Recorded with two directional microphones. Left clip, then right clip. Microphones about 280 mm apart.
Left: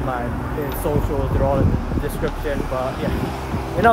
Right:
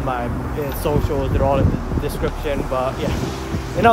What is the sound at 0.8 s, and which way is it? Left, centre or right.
Speech, centre.